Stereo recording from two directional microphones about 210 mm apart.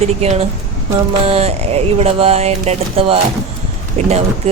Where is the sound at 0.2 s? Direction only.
30° right (ahead or behind).